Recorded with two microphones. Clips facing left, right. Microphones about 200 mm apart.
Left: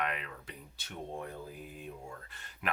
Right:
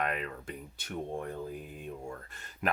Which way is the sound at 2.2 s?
45° right (ahead or behind).